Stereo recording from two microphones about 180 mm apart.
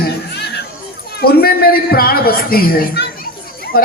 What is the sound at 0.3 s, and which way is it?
Chatter, 65° left (ahead or behind).